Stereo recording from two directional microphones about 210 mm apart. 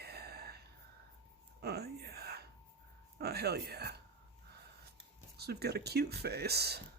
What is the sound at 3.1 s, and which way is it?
Speech, 50° right (ahead or behind).